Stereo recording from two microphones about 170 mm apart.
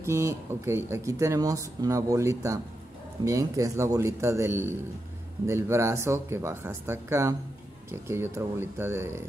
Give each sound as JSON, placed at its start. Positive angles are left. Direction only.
{"t": 0.0, "sound": "speech", "side_deg": -15}